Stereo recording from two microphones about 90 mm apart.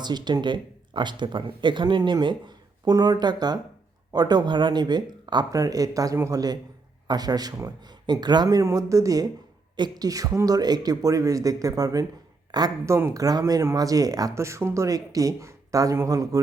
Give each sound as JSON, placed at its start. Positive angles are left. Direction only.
{"t": 0.0, "sound": "speech", "side_deg": -55}
{"t": 12.8, "sound": "speech", "side_deg": -30}